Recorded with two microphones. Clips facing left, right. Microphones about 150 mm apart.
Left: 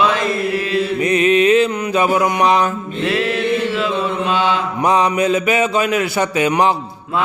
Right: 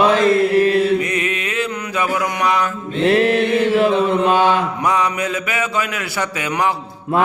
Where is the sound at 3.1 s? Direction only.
50° right (ahead or behind).